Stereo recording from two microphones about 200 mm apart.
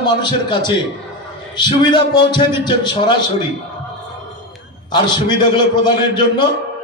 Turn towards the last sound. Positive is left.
turn(degrees=20)  # may be behind; listen again after turning